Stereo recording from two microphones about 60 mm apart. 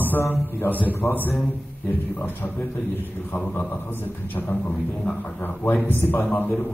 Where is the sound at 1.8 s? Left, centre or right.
Left.